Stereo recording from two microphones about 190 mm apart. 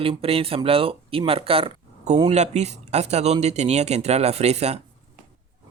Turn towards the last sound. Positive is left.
turn(degrees=-35)  # may be behind; listen again after turning